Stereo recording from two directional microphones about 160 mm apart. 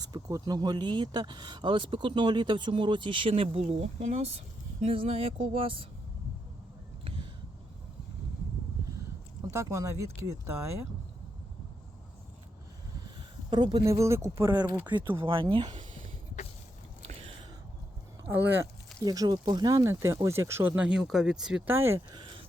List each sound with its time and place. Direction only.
0.0 s speech: 20° right (ahead or behind)
9.5 s speech: 20° right (ahead or behind)
13.5 s speech: 30° right (ahead or behind)
14.8 s speech: 30° right (ahead or behind)
18.4 s speech: 15° right (ahead or behind)
22.1 s a sound: 30° right (ahead or behind)